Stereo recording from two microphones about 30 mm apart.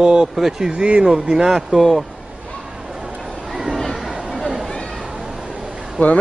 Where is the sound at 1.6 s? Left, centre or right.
Centre.